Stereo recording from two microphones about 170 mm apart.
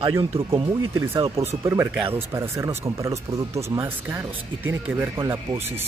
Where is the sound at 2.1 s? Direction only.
15° right (ahead or behind).